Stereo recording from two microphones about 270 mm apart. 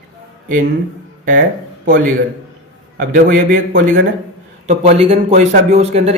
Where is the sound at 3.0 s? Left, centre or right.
Right.